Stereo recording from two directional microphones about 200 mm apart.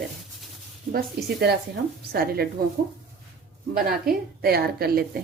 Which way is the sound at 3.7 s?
50° right (ahead or behind).